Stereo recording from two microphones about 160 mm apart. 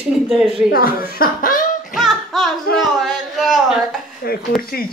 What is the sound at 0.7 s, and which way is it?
Speech, 65° left (ahead or behind).